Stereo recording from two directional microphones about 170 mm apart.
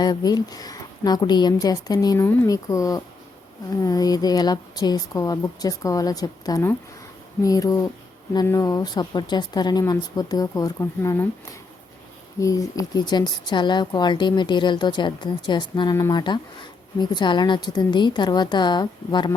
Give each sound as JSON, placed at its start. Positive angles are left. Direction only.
{"t": 0.0, "sound": "speech", "side_deg": 25}
{"t": 12.4, "sound": "speech", "side_deg": 20}